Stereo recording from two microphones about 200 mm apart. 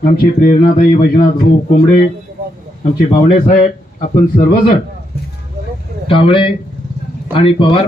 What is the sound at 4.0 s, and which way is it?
Speech, 45° left (ahead or behind).